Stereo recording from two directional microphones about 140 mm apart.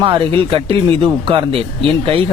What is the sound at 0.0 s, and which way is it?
Speech, 35° right (ahead or behind).